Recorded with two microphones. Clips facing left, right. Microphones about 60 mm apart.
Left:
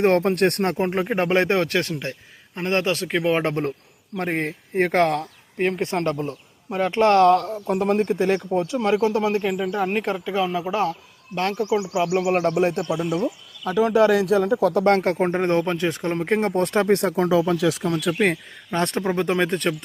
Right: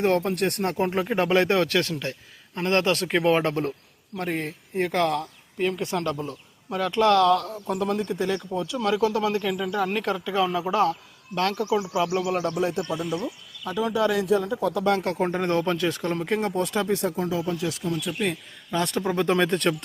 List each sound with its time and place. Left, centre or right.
0.0 s speech: left
0.8 s speech: left
2.9 s speech: centre
3.3 s speech: left
4.2 s speech: left; by 12.1 s centre
12.3 s speech: left
15.1 s speech: left
16.6 s speech: left
18.1 s speech: left
18.9 s speech: left